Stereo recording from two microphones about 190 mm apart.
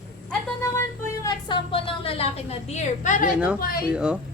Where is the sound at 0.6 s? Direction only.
15° left (ahead or behind); by 3.3 s 40° left (ahead or behind).